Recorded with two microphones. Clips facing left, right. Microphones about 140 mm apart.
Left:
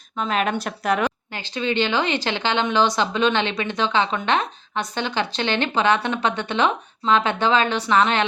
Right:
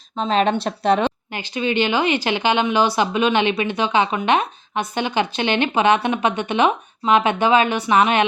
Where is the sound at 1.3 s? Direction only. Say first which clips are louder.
Right 2 dB; 15° right (ahead or behind).